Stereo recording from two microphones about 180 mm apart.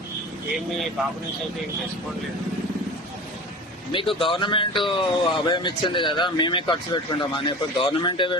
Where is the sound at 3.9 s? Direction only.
30° left (ahead or behind).